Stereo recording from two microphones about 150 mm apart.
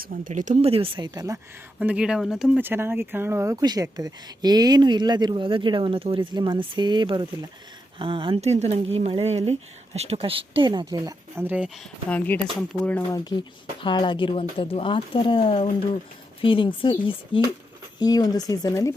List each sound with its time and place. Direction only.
0.0 s speech: 65° right (ahead or behind); by 1.4 s 25° right (ahead or behind)
1.8 s speech: 10° right (ahead or behind); by 11.1 s 30° right (ahead or behind)
11.3 s speech: 10° right (ahead or behind)
12.0 s speech: 10° left (ahead or behind)
13.1 s speech: 20° left (ahead or behind)
13.8 s speech: 30° left (ahead or behind)